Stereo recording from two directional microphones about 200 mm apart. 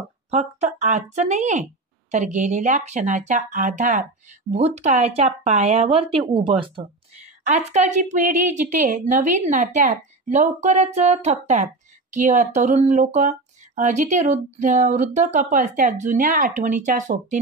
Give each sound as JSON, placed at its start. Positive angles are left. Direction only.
{"t": 0.3, "sound": "speech", "side_deg": -35}